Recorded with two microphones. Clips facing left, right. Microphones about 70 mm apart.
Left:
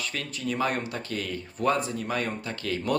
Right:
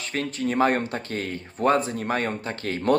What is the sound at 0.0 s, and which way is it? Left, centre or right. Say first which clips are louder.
Speech: right 5 dB; right.